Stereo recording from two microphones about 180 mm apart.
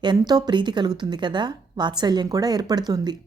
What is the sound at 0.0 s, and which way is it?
A woman's voice, 25° right (ahead or behind).